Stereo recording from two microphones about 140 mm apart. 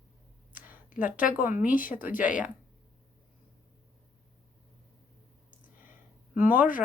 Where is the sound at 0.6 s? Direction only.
10° right (ahead or behind).